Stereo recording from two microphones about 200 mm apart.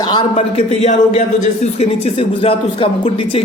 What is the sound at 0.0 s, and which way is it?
Speech, 20° left (ahead or behind).